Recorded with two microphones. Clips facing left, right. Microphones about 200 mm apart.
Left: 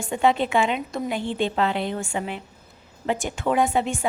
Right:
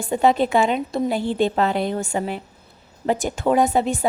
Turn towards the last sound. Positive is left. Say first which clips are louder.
# right 3 dB
turn(degrees=-40)  # may be behind; listen again after turning